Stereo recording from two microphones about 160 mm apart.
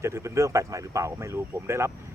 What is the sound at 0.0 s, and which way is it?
Speech, 15° right (ahead or behind).